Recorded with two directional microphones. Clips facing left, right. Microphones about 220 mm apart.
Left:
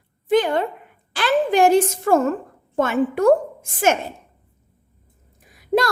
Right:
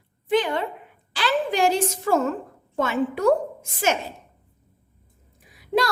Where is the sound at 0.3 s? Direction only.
45° left (ahead or behind).